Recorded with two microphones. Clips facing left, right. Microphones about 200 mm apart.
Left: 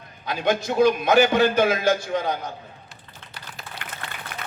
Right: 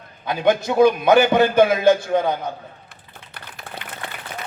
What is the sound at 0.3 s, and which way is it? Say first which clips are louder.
A man's voice: right 4 dB; 55° right (ahead or behind).